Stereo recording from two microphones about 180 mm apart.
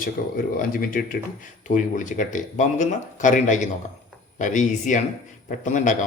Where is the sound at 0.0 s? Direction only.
50° left (ahead or behind).